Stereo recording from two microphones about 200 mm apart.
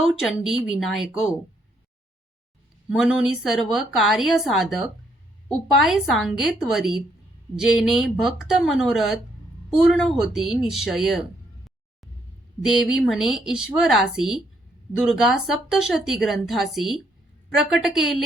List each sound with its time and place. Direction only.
0.0 s speech: centre (ahead or behind)
2.9 s speech: 5° right (ahead or behind)